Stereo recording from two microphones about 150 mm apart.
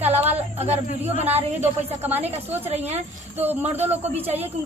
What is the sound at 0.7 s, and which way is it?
Speech, 45° right (ahead or behind).